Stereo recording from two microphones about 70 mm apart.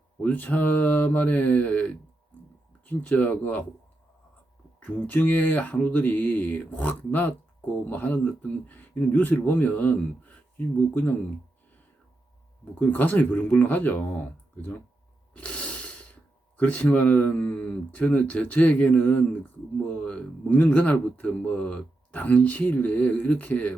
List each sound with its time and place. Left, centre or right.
0.2 s speech: left
4.8 s speech: centre
12.8 s speech: left
15.3 s snort: centre
16.6 s speech: left